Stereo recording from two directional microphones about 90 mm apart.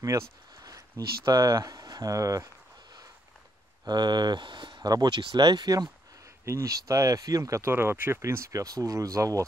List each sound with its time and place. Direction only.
0.0 s speech: 40° right (ahead or behind)
3.8 s speech: 55° right (ahead or behind)
6.4 s speech: 35° right (ahead or behind)